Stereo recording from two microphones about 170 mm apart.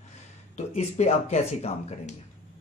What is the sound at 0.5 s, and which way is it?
Speech, 40° left (ahead or behind).